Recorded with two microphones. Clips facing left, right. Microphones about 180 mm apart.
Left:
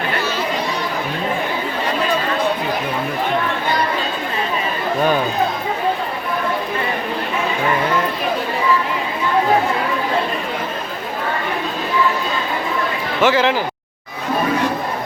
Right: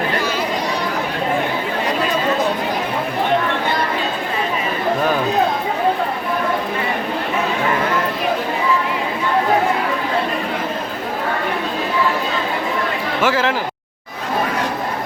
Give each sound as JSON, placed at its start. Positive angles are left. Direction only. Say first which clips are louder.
{"t": 13.2, "sound": "speech", "louder": "left 3 dB", "side_deg": -5}